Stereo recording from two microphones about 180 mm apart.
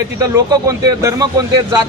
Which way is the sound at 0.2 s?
20° right (ahead or behind).